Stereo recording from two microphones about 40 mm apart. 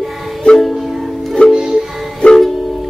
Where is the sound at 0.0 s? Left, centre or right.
Centre.